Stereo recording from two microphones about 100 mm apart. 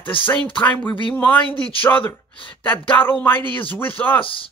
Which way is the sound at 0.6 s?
15° left (ahead or behind).